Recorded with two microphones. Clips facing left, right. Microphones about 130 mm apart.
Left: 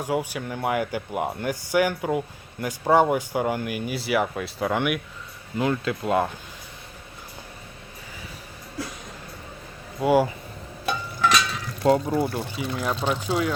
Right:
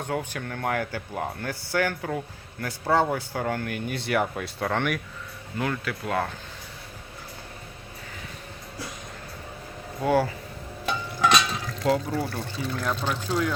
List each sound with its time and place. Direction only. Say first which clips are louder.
0.0 s speech: left 4 dB; 10° left (ahead or behind)
5.5 s speech: left 5 dB; 20° left (ahead or behind)
10.0 s speech: left 3 dB; 10° left (ahead or behind)
11.8 s speech: left 5 dB; 30° left (ahead or behind)